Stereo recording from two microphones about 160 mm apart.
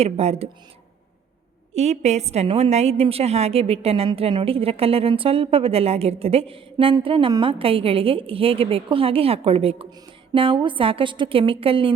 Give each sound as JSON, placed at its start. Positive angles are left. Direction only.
{"t": 0.0, "sound": "a woman's voice", "side_deg": -40}
{"t": 1.7, "sound": "a woman's voice", "side_deg": -45}